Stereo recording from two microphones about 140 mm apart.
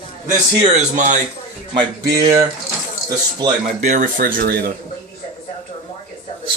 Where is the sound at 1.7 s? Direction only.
30° right (ahead or behind).